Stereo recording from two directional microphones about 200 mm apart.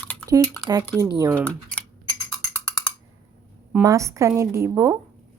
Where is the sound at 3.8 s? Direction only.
15° right (ahead or behind).